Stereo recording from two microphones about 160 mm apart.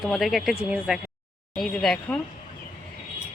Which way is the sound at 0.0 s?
Centre (ahead or behind).